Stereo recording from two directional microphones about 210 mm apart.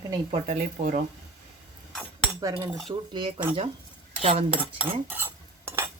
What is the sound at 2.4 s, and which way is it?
Cutlery, 15° right (ahead or behind).